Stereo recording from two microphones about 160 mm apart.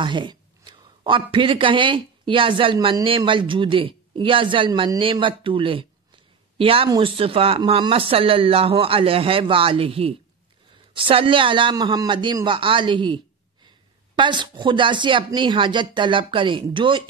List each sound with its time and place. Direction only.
0.0 s speech: 30° right (ahead or behind)